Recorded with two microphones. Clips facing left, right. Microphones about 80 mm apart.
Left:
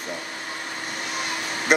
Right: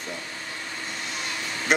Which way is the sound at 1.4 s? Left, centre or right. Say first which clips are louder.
Left 3 dB; left.